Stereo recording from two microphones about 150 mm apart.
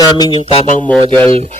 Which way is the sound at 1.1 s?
35° right (ahead or behind).